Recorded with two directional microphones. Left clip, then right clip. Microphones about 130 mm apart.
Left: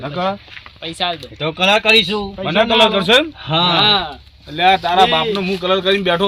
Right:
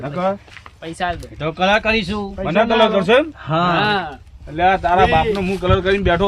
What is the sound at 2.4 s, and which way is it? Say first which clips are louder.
Speech: left 2 dB; centre (ahead or behind).